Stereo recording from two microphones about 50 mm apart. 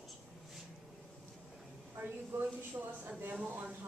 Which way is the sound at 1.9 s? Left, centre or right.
Right.